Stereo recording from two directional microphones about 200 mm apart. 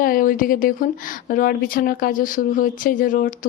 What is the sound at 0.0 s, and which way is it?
A woman's voice, 45° left (ahead or behind).